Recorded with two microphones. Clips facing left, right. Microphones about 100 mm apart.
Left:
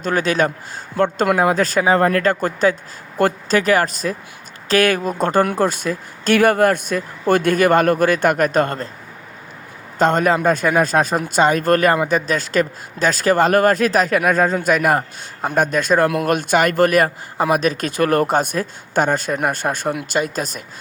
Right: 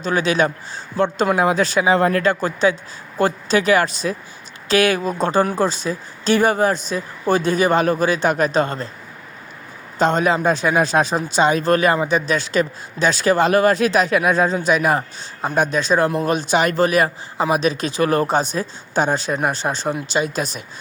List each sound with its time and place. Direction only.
0.0 s speech: 45° left (ahead or behind)
5.2 s speech: 55° left (ahead or behind)
10.0 s speech: 50° left (ahead or behind)